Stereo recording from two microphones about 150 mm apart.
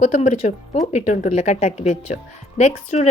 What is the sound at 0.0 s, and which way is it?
A woman's voice, 45° left (ahead or behind).